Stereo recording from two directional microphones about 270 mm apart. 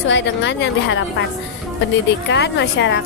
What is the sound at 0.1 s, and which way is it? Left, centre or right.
Speech, left.